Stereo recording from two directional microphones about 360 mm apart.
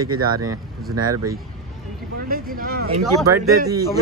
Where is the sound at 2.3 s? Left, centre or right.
Right.